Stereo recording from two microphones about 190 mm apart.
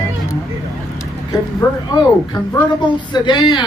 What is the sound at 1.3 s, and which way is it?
Speech, 20° left (ahead or behind).